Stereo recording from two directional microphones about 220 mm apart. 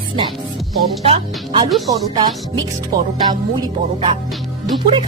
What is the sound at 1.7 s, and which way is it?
Speech, centre (ahead or behind).